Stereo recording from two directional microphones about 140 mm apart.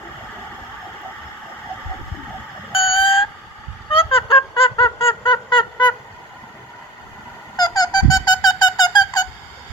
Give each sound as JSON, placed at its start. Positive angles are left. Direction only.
{"t": 2.7, "sound": "vehicle", "side_deg": 40}
{"t": 3.8, "sound": "fowl", "side_deg": 40}
{"t": 7.5, "sound": "a sound", "side_deg": 25}